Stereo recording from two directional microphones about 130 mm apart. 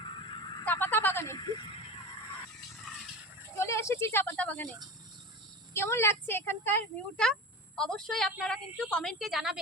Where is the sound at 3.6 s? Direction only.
20° left (ahead or behind).